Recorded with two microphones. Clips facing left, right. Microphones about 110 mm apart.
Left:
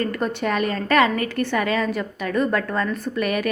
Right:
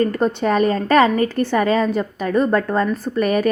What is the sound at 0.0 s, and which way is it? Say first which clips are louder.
Speech: right 6 dB; 35° right (ahead or behind).